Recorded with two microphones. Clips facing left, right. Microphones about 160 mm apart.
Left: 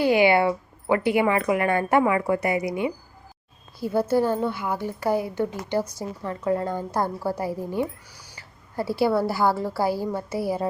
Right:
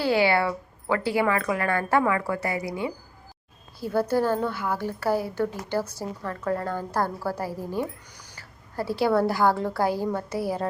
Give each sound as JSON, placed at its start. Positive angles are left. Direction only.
{"t": 0.0, "sound": "a woman's voice", "side_deg": 15}
{"t": 4.1, "sound": "a woman's voice", "side_deg": 10}